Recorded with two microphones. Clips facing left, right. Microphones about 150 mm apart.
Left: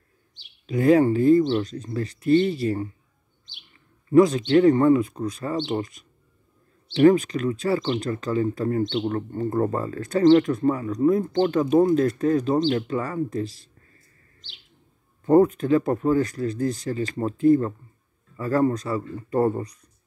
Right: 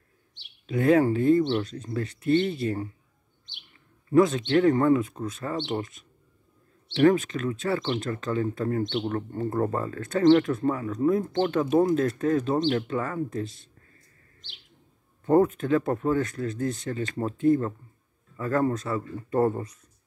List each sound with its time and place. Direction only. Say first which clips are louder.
0.7 s speech: left 3 dB; centre (ahead or behind)
4.1 s a man's voice: left 4 dB; centre (ahead or behind)
15.2 s speech: left 4 dB; 5° left (ahead or behind)